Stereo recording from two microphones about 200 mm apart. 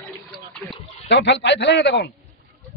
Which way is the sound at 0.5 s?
5° left (ahead or behind).